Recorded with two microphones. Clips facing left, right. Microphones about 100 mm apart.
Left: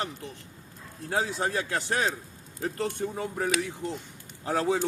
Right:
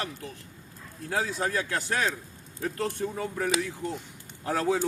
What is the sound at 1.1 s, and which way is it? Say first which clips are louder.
Speech: even; 25° left (ahead or behind).